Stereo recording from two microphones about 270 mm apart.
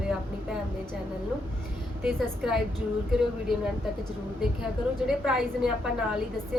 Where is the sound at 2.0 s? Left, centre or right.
Centre.